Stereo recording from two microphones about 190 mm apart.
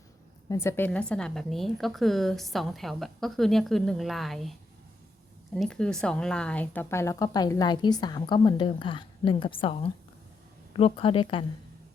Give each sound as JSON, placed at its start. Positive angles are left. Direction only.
{"t": 0.4, "sound": "a woman's voice", "side_deg": 15}
{"t": 5.5, "sound": "speech", "side_deg": 5}